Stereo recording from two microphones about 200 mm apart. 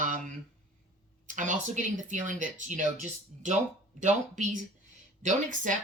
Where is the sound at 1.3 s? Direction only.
40° right (ahead or behind).